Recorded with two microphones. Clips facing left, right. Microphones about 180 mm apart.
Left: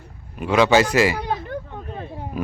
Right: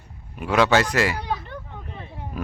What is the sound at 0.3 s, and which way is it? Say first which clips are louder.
Speech: left 3 dB; centre (ahead or behind).